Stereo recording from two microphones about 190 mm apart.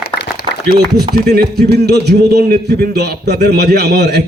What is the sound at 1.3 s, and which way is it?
A man's voice, 55° right (ahead or behind).